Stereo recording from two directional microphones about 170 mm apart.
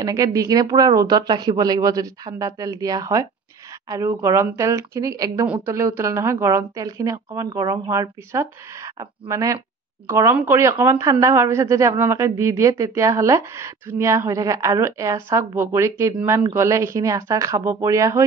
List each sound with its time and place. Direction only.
0.0 s speech: 20° right (ahead or behind)